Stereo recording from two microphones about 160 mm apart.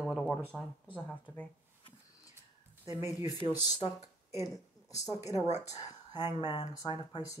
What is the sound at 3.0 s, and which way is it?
Speech, 15° right (ahead or behind).